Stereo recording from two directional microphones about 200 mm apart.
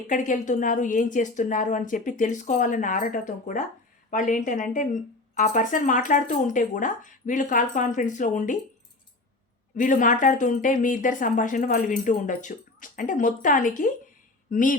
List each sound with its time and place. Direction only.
0.1 s speech: 40° left (ahead or behind)
9.7 s speech: 40° left (ahead or behind)